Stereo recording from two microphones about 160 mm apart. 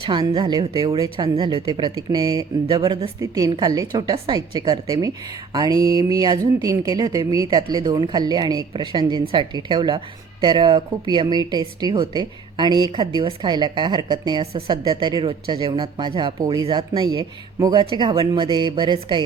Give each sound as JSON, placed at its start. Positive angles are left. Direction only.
{"t": 0.0, "sound": "a woman's voice", "side_deg": -25}